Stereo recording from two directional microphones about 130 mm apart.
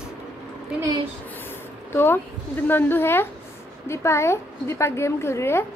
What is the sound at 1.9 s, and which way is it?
A woman's voice, 20° left (ahead or behind).